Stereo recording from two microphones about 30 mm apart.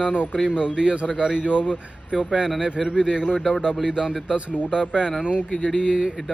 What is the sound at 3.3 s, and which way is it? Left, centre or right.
Speech, centre.